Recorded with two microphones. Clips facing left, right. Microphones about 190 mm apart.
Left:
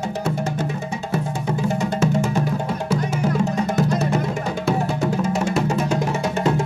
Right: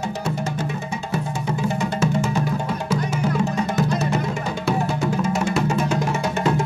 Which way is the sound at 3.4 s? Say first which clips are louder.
Left 1 dB; 45° left (ahead or behind).